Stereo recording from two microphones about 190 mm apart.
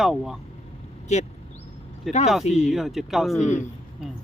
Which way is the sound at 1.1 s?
35° left (ahead or behind).